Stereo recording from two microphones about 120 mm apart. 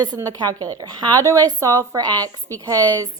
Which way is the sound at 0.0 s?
30° right (ahead or behind).